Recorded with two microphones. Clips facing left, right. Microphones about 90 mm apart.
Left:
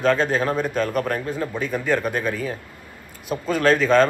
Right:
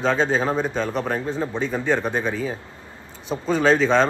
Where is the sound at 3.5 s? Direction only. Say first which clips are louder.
Even; 25° right (ahead or behind).